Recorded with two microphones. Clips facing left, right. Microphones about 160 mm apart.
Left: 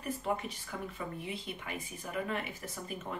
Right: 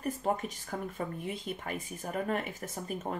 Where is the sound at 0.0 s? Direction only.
45° right (ahead or behind).